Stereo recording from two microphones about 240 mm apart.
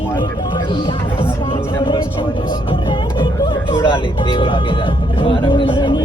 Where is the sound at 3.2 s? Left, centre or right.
Centre.